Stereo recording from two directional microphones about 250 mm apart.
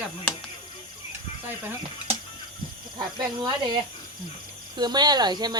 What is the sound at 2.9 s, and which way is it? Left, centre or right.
Speech, centre.